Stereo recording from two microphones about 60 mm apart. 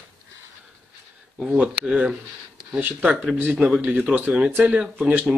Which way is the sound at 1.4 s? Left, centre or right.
Right.